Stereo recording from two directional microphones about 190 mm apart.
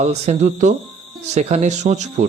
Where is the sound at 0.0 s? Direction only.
35° right (ahead or behind).